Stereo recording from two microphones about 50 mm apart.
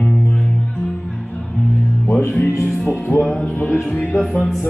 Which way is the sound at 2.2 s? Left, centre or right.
Left.